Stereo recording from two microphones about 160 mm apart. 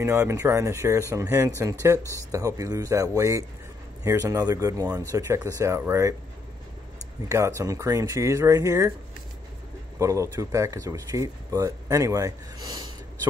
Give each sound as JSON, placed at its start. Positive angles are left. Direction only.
{"t": 0.0, "sound": "speech", "side_deg": -15}
{"t": 7.2, "sound": "speech", "side_deg": -20}
{"t": 9.9, "sound": "speech", "side_deg": -20}